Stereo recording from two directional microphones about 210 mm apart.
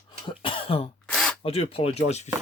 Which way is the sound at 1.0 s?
Centre (ahead or behind).